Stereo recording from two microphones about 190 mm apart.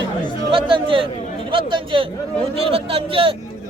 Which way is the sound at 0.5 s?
25° right (ahead or behind).